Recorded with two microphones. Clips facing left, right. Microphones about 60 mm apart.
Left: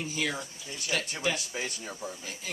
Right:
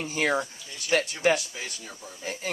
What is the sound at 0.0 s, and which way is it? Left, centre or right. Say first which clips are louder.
Speech: right 7 dB; right.